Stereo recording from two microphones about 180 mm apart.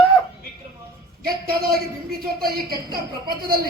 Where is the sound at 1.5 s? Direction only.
55° right (ahead or behind).